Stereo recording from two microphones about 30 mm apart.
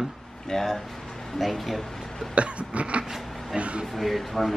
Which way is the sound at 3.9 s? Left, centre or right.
Centre.